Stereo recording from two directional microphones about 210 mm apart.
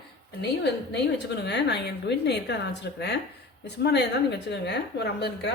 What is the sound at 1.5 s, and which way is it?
A woman's voice, 55° left (ahead or behind).